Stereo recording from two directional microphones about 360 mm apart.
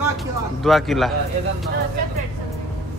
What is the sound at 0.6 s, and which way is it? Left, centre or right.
Speech, centre.